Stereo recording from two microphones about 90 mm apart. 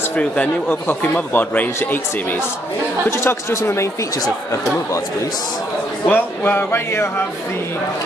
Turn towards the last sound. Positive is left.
turn(degrees=25)  # may be behind; listen again after turning